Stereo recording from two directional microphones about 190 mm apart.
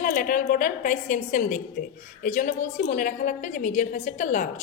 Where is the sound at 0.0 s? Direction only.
45° left (ahead or behind).